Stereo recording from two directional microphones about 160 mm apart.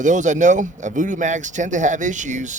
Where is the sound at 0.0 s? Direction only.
50° right (ahead or behind).